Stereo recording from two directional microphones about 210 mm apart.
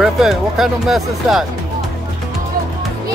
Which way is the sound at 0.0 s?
Centre (ahead or behind).